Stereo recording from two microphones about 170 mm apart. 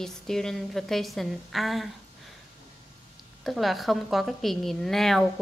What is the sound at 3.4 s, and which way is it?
A woman's voice, centre (ahead or behind).